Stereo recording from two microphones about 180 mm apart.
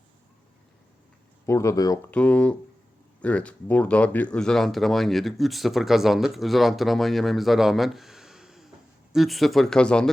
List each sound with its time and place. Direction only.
1.5 s speech: 15° left (ahead or behind)
2.0 s speech: 5° left (ahead or behind)